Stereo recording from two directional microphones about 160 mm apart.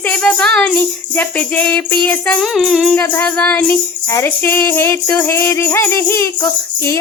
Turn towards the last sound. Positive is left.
turn(degrees=15)  # may be behind; listen again after turning